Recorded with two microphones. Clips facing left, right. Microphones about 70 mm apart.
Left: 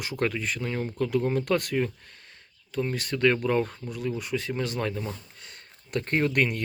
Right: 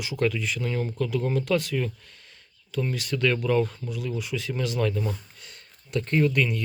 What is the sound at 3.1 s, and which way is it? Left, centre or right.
Speech, left.